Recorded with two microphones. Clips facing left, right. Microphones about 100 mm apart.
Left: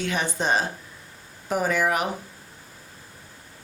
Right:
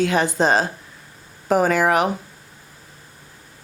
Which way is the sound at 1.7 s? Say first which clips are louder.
Right 6 dB; 90° right.